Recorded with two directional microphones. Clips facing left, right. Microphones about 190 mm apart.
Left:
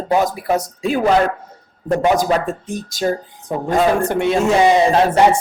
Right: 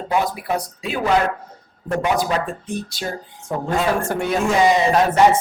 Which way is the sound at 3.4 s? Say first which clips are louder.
Left 4 dB; 15° left (ahead or behind).